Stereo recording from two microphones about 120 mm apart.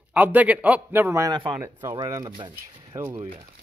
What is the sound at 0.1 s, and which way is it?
A man's voice, 15° right (ahead or behind).